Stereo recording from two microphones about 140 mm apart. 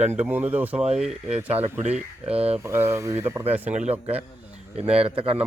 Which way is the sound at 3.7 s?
50° right (ahead or behind).